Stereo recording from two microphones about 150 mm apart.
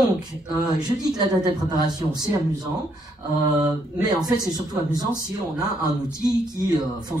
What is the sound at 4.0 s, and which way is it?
Speech, 25° right (ahead or behind).